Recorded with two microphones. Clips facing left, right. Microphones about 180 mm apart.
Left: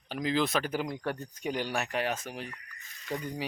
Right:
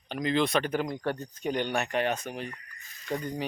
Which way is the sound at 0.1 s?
5° left (ahead or behind).